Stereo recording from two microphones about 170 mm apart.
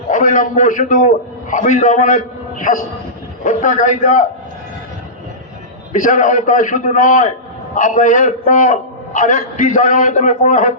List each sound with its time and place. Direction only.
0.1 s a man's voice: 50° left (ahead or behind)
5.9 s a man's voice: 50° left (ahead or behind)